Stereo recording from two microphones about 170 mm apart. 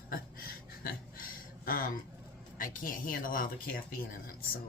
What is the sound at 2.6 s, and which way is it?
Speech, 55° left (ahead or behind).